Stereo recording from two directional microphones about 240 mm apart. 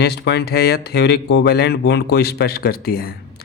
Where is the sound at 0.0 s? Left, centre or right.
Left.